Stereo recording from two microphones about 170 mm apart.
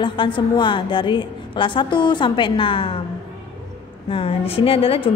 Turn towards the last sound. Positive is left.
turn(degrees=35)  # may be behind; listen again after turning